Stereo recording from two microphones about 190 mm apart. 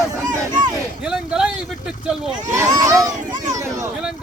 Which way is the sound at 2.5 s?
20° right (ahead or behind).